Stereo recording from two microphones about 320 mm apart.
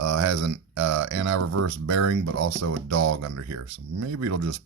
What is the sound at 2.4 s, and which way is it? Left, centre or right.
Speech, right.